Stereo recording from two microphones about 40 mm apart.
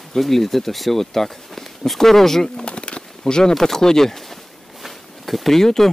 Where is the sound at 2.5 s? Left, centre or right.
Left; by 4.4 s centre.